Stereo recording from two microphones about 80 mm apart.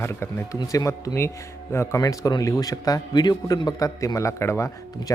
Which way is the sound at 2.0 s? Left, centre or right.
Left.